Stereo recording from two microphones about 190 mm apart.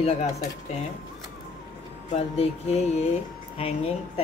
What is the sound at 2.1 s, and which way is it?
Speech, 35° left (ahead or behind).